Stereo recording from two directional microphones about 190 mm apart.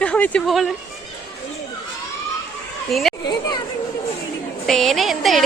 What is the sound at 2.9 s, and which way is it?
Speech, centre (ahead or behind).